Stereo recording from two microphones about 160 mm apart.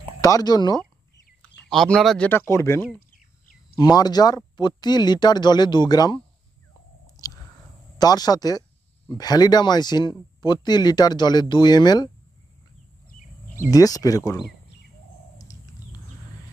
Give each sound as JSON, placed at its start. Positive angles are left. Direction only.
{"t": 0.2, "sound": "speech", "side_deg": 25}
{"t": 1.4, "sound": "speech", "side_deg": 5}
{"t": 3.9, "sound": "speech", "side_deg": 25}
{"t": 8.0, "sound": "speech", "side_deg": 25}
{"t": 13.7, "sound": "speech", "side_deg": 20}